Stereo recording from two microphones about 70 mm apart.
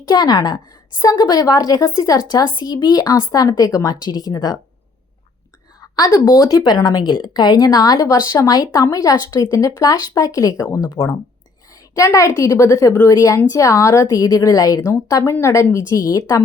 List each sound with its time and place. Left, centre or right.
0.1 s a woman's voice: left
6.1 s a woman's voice: left
9.7 s a woman's voice: left